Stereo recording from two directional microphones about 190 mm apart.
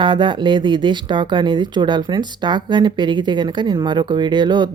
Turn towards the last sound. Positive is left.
turn(degrees=-25)  # may be behind; listen again after turning